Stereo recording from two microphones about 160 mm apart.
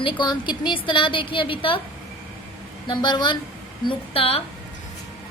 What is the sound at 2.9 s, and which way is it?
A woman's voice, 30° left (ahead or behind).